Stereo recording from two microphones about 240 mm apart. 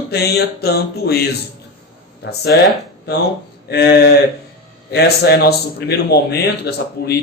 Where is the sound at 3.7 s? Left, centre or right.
Left.